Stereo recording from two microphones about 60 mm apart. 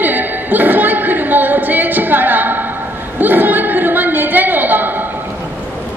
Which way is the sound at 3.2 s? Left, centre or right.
Right.